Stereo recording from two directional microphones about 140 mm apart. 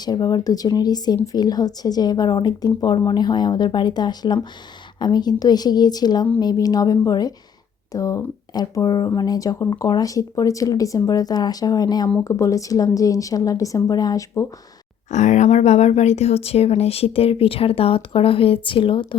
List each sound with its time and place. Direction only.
0.0 s speech: 30° left (ahead or behind)
15.1 s speech: 55° left (ahead or behind); by 19.0 s 35° left (ahead or behind)